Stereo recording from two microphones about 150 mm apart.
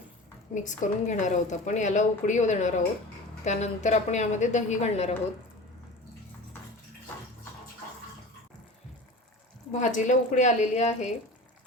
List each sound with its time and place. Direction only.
0.5 s speech: 55° left (ahead or behind)
9.7 s speech: 55° left (ahead or behind)